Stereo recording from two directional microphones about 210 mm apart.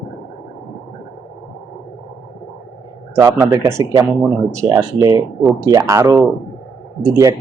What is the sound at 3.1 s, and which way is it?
Speech, 15° right (ahead or behind).